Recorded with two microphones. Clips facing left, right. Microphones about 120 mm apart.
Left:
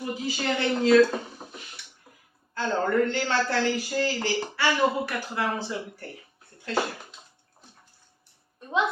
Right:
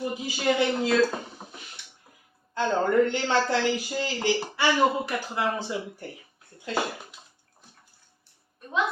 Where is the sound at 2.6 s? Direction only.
20° right (ahead or behind).